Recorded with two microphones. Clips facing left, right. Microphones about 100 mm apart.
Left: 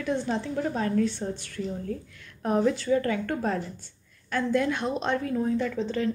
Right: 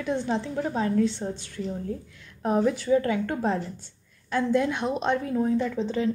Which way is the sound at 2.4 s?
15° right (ahead or behind).